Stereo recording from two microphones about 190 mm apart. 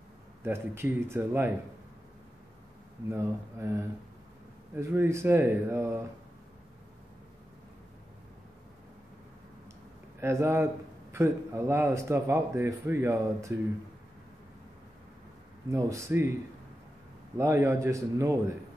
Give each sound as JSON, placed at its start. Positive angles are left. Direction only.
{"t": 0.4, "sound": "a man's voice", "side_deg": -15}
{"t": 3.1, "sound": "a man's voice", "side_deg": -15}
{"t": 10.2, "sound": "a man's voice", "side_deg": -15}
{"t": 15.7, "sound": "a man's voice", "side_deg": -15}
{"t": 17.4, "sound": "a man's voice", "side_deg": -15}